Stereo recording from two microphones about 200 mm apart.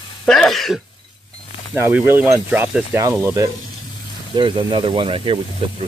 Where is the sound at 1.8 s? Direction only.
10° right (ahead or behind).